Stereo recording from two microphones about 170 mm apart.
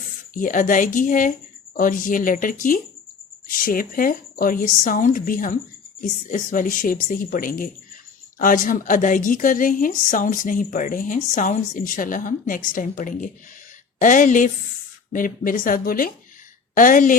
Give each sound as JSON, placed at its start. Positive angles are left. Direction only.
{"t": 0.3, "sound": "a woman's voice", "side_deg": 50}